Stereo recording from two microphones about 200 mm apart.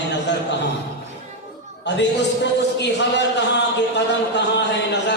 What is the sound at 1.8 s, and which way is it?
A man's voice, 60° left (ahead or behind).